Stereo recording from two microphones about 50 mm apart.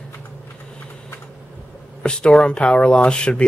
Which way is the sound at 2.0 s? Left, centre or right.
Centre.